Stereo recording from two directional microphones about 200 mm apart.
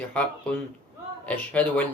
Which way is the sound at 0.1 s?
5° left (ahead or behind).